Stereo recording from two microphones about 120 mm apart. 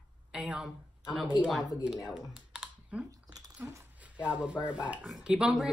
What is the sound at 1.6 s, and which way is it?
Speech, 30° left (ahead or behind).